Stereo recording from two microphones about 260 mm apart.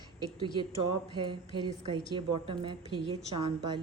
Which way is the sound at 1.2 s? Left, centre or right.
Centre.